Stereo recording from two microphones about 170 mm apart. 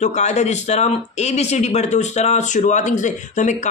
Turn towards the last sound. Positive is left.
turn(degrees=45)  # may be behind; listen again after turning